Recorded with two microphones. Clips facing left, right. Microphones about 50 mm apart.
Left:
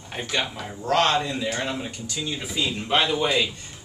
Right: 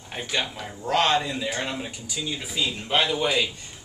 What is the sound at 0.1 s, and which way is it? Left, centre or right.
Speech, centre.